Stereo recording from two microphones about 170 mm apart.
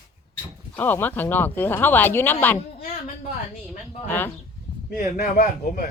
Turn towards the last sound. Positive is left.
turn(degrees=60)  # may be behind; listen again after turning